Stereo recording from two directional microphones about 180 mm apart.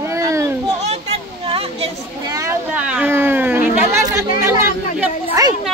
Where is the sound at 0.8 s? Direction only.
35° right (ahead or behind).